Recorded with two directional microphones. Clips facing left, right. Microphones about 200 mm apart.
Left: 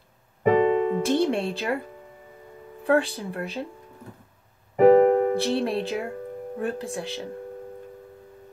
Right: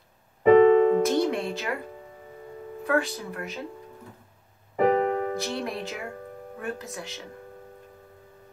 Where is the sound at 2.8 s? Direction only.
30° left (ahead or behind).